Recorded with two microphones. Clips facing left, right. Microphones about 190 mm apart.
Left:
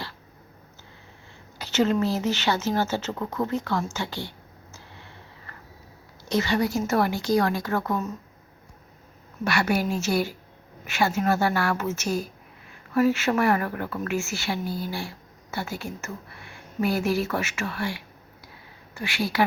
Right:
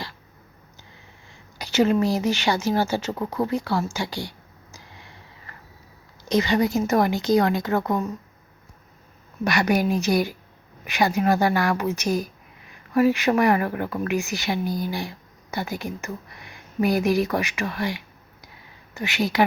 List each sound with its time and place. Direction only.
1.5 s speech: 10° right (ahead or behind)
6.2 s a woman's voice: 15° right (ahead or behind)
9.4 s a woman's voice: 15° right (ahead or behind)